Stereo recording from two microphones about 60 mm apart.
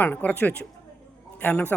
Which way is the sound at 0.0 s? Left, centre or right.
Left.